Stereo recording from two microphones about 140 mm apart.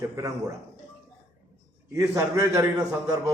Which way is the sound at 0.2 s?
20° right (ahead or behind).